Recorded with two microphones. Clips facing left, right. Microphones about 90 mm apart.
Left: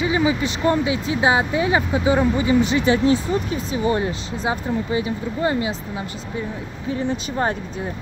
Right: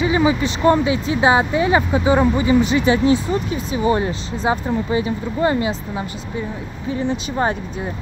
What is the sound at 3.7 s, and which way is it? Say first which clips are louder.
Speech: right 3 dB; 20° right (ahead or behind).